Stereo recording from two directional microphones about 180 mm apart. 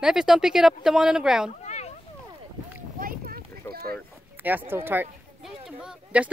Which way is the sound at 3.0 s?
55° right (ahead or behind).